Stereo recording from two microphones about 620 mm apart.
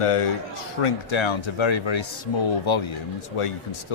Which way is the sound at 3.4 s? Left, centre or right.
Left.